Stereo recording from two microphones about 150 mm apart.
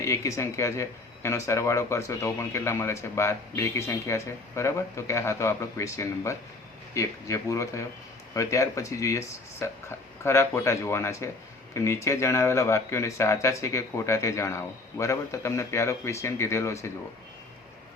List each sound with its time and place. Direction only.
0.0 s speech: 20° left (ahead or behind)